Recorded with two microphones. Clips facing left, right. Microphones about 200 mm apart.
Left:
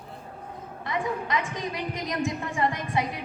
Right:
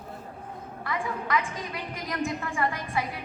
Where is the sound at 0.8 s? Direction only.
20° left (ahead or behind).